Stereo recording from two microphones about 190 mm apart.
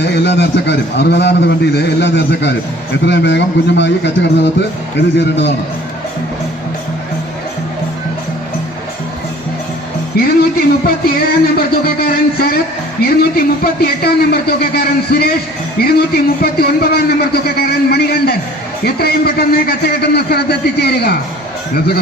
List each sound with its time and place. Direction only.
0.0 s a man's voice: 65° left (ahead or behind)
10.1 s a man's voice: 55° left (ahead or behind)